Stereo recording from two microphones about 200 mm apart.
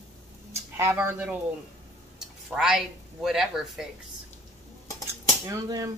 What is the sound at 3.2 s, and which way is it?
Speech, centre (ahead or behind).